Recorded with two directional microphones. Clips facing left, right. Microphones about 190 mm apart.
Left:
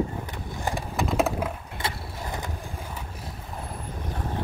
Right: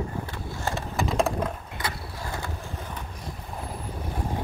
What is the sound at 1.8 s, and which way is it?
Vehicle, 20° left (ahead or behind).